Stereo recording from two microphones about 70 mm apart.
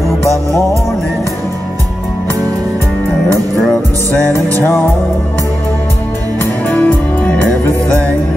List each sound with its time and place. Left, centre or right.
6.4 s music: left